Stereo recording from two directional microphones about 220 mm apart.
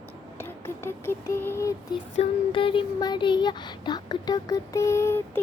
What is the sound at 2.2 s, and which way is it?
Speech, 25° left (ahead or behind).